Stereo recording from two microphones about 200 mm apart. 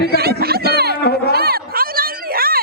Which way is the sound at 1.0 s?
50° left (ahead or behind).